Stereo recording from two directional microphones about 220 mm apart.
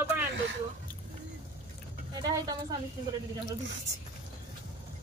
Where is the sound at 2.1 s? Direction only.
15° right (ahead or behind).